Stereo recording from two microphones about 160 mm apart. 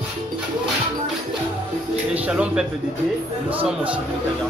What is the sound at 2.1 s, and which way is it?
Speech, 5° right (ahead or behind).